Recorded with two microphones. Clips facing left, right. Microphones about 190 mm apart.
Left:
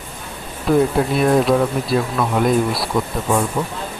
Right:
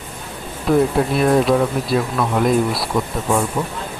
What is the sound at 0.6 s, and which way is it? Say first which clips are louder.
Speech: even; centre (ahead or behind).